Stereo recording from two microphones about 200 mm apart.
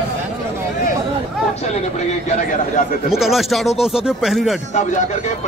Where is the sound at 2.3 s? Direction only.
40° left (ahead or behind).